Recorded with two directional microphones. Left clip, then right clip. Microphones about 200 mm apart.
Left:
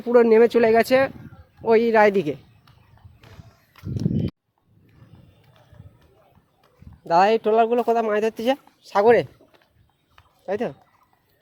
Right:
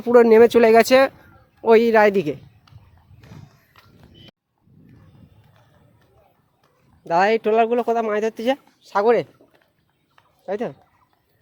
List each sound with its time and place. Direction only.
0.1 s speech: 15° right (ahead or behind)
7.0 s speech: 5° right (ahead or behind)
10.4 s speech: 5° right (ahead or behind)